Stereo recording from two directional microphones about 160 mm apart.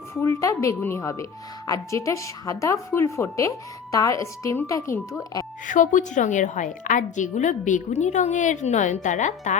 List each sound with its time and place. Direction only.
0.1 s a woman's voice: 20° left (ahead or behind)
5.6 s a woman's voice: 55° left (ahead or behind)